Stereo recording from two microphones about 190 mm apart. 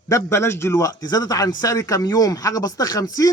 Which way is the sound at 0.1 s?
15° left (ahead or behind).